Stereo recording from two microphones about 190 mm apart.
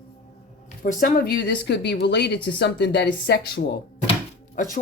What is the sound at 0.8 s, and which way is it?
Speech, 45° left (ahead or behind).